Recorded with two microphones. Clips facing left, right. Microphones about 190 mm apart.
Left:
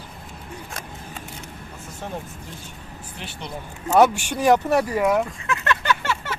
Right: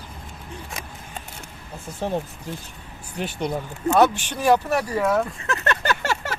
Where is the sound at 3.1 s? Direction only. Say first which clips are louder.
Right 10 dB; 45° right (ahead or behind).